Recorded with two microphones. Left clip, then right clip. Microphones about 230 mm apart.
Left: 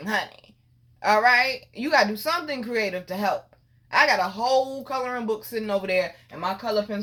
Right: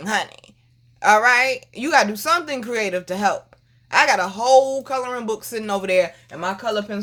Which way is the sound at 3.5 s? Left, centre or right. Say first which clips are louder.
Right 6 dB; right.